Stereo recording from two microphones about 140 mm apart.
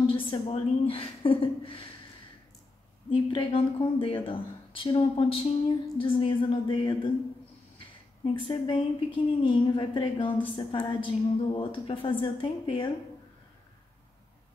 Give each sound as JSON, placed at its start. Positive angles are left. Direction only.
{"t": 0.0, "sound": "a woman's voice", "side_deg": 40}
{"t": 3.1, "sound": "a woman's voice", "side_deg": 40}
{"t": 8.3, "sound": "a woman's voice", "side_deg": 35}